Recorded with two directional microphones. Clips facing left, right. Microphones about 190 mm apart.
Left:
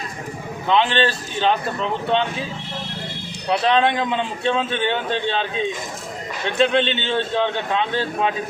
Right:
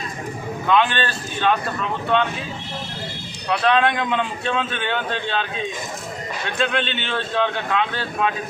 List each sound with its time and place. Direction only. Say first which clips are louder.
0.7 s a man's voice: left 1 dB; 25° left (ahead or behind)
3.5 s a man's voice: left 1 dB; 25° left (ahead or behind)
6.6 s a man's voice: left 6 dB; 20° left (ahead or behind)